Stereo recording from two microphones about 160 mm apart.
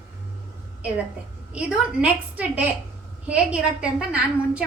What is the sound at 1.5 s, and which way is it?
A woman's voice, 5° right (ahead or behind).